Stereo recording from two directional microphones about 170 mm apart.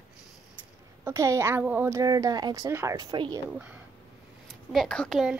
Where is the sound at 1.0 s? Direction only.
15° right (ahead or behind).